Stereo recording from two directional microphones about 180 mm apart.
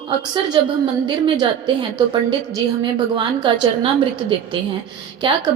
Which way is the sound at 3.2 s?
25° right (ahead or behind).